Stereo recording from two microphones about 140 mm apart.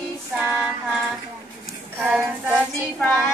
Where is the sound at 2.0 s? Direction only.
10° right (ahead or behind).